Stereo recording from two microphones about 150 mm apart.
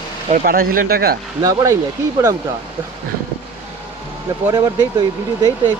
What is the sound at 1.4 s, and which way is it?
Speech, 20° right (ahead or behind).